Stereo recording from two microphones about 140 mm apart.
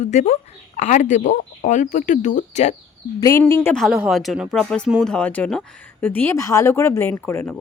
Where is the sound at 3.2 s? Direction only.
20° left (ahead or behind).